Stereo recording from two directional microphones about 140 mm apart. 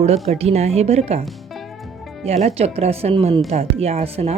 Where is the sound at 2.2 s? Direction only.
50° right (ahead or behind).